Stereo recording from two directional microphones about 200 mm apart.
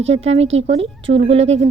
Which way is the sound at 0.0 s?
30° right (ahead or behind).